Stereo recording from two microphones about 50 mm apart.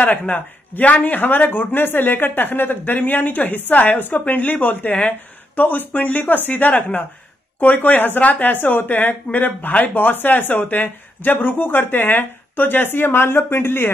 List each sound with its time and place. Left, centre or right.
0.0 s speech: left